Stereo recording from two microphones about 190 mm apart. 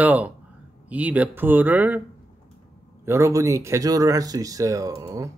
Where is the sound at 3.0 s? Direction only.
15° right (ahead or behind).